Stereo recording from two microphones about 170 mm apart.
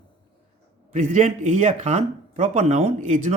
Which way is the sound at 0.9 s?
45° right (ahead or behind).